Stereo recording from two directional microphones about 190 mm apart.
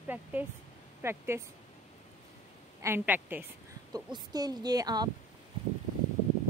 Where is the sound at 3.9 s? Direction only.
20° right (ahead or behind).